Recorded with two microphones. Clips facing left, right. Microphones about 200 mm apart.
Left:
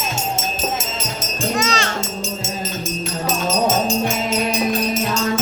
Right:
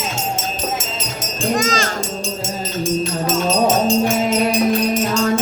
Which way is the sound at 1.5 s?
45° right (ahead or behind).